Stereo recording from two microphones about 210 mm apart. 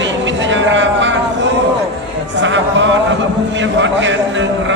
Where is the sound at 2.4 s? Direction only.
60° right (ahead or behind).